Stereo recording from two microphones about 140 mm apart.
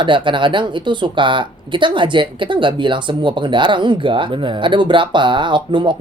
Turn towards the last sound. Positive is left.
turn(degrees=-35)  # may be behind; listen again after turning